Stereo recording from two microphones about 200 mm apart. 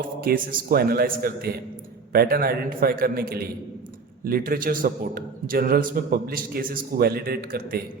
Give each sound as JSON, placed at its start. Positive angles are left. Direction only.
{"t": 0.2, "sound": "a man's voice", "side_deg": -45}